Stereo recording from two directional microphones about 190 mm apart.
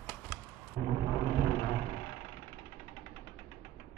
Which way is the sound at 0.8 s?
30° left (ahead or behind).